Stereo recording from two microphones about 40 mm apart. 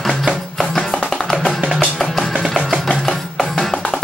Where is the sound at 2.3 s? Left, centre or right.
Centre.